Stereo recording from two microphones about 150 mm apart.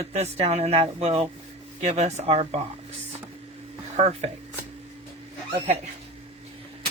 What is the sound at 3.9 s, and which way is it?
Speech, 45° right (ahead or behind).